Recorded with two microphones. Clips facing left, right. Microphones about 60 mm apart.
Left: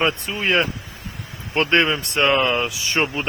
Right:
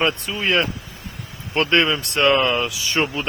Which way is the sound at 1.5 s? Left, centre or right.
Left.